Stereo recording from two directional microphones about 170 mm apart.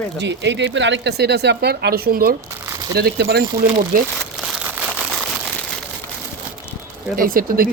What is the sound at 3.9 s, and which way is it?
Speech, 55° right (ahead or behind).